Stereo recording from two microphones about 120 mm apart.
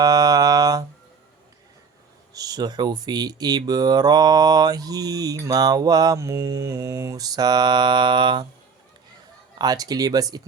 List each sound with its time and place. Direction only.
0.0 s a sound: 30° right (ahead or behind)
2.3 s speech: 30° right (ahead or behind)
9.6 s speech: 30° right (ahead or behind)